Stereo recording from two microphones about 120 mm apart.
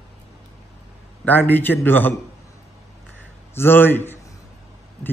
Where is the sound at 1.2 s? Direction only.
15° left (ahead or behind).